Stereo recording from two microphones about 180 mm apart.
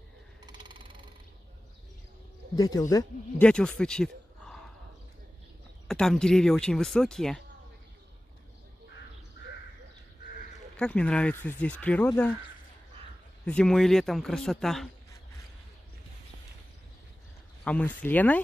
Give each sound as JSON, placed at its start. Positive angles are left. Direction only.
{"t": 0.5, "sound": "a sound", "side_deg": -25}
{"t": 2.5, "sound": "speech", "side_deg": 20}
{"t": 3.4, "sound": "speech", "side_deg": 5}
{"t": 5.9, "sound": "speech", "side_deg": 5}
{"t": 10.8, "sound": "speech", "side_deg": 5}
{"t": 13.5, "sound": "speech", "side_deg": 5}
{"t": 17.6, "sound": "speech", "side_deg": 10}